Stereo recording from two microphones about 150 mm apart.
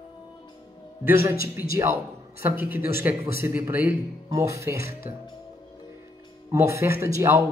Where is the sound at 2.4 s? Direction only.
15° right (ahead or behind).